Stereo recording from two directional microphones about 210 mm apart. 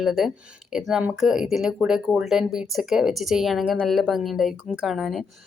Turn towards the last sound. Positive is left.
turn(degrees=0)  # may be behind; listen again after turning